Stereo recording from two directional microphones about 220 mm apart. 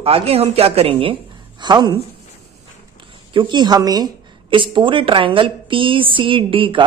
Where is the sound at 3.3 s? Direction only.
20° right (ahead or behind).